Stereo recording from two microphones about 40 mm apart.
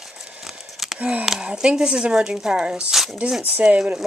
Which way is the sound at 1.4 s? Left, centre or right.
Right.